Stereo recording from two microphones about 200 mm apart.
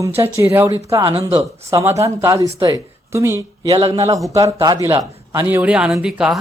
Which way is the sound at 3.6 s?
30° right (ahead or behind).